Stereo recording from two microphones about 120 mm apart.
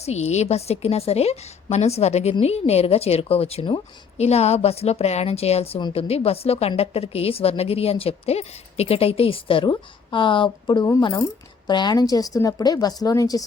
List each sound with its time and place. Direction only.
0.0 s a woman's voice: 65° left (ahead or behind); by 10.8 s 40° left (ahead or behind)
11.0 s a woman's voice: 30° left (ahead or behind)